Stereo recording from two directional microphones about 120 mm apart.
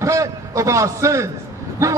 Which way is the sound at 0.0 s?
25° right (ahead or behind).